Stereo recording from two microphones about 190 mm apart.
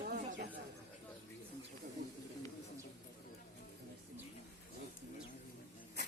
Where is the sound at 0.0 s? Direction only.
50° right (ahead or behind).